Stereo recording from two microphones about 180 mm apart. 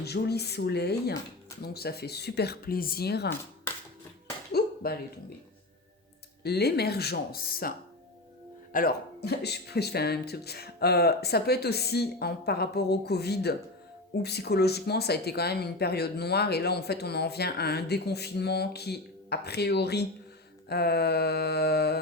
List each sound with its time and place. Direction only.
0.0 s speech: 65° left (ahead or behind)
4.5 s a sound: 60° left (ahead or behind)
6.4 s speech: 65° left (ahead or behind)
8.7 s speech: 55° left (ahead or behind)